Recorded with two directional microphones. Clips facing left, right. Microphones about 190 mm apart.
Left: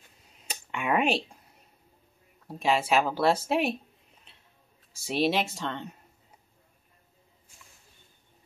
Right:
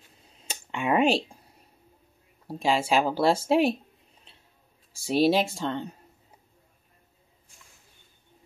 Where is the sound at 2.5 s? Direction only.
30° right (ahead or behind).